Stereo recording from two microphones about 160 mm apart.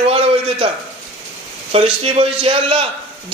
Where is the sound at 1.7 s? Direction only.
40° right (ahead or behind).